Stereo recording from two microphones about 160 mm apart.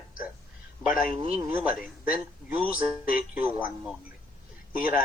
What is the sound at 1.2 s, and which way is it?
Speech, 40° right (ahead or behind).